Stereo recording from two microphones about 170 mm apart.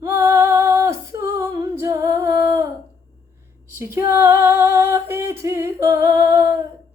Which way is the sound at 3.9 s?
15° right (ahead or behind).